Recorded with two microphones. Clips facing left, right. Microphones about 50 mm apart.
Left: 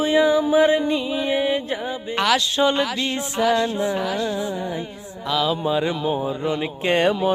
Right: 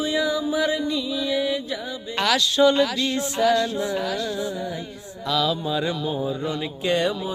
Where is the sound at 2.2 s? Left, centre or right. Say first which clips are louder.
Right 1 dB; left.